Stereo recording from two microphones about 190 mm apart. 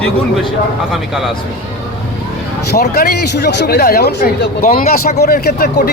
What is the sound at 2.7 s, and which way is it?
A man's voice, 55° left (ahead or behind).